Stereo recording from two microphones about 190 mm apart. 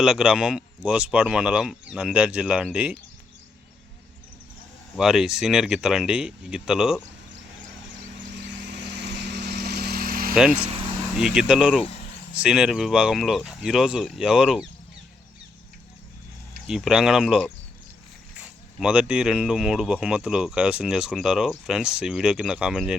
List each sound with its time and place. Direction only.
0.0 s speech: 5° right (ahead or behind)
4.9 s speech: 5° right (ahead or behind)
8.4 s vehicle: 65° right (ahead or behind); by 10.3 s 50° right (ahead or behind)
10.3 s speech: 5° right (ahead or behind)
11.8 s speech: 35° left (ahead or behind)
12.3 s speech: 5° right (ahead or behind)
16.6 s speech: 5° right (ahead or behind)
18.8 s speech: 5° right (ahead or behind)